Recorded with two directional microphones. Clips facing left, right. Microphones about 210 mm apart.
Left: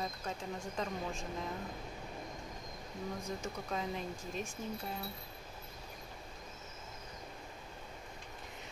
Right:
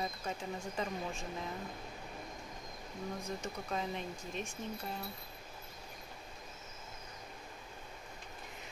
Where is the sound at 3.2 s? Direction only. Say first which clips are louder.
Even; centre (ahead or behind).